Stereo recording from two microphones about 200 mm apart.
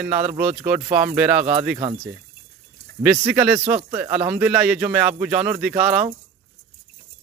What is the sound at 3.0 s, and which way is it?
A man's voice, 5° right (ahead or behind).